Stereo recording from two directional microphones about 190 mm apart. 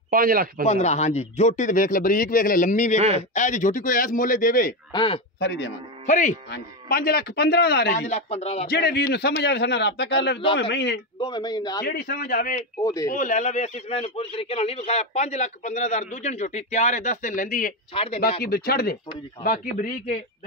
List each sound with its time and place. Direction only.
0.1 s speech: 50° right (ahead or behind)
0.7 s speech: 35° left (ahead or behind)
4.9 s a man's voice: 25° left (ahead or behind)
5.4 s a man's voice: 65° left (ahead or behind)
6.0 s speech: 40° left (ahead or behind)
6.5 s a man's voice: 50° left (ahead or behind)
8.1 s a man's voice: 35° left (ahead or behind)
8.6 s a man's voice: 55° left (ahead or behind)
11.1 s a man's voice: 25° left (ahead or behind)
11.8 s speech: 50° left (ahead or behind)
12.8 s speech: 20° left (ahead or behind)
13.1 s a man's voice: 45° left (ahead or behind)
17.9 s a man's voice: 30° left (ahead or behind)
18.4 s speech: 55° left (ahead or behind)